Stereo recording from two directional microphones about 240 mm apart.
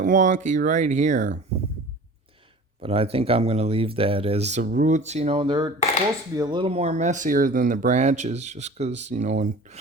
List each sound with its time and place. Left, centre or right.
0.0 s speech: right
2.8 s speech: right